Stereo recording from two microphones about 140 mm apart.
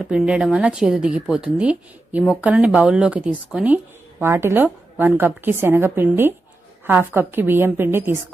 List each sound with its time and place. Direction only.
0.0 s a woman's voice: 5° right (ahead or behind)